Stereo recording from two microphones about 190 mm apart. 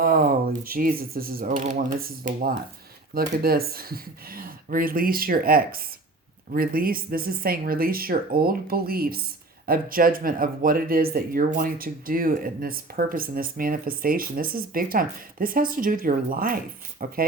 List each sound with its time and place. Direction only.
0.0 s speech: 50° right (ahead or behind)